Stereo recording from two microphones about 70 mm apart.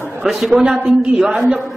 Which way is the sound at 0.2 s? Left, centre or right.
Centre.